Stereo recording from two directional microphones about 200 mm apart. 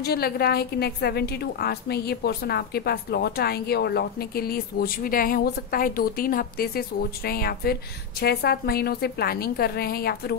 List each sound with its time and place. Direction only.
0.0 s a woman's voice: 50° left (ahead or behind)